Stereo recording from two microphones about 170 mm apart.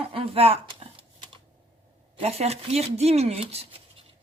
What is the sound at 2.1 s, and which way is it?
Speech, 40° right (ahead or behind).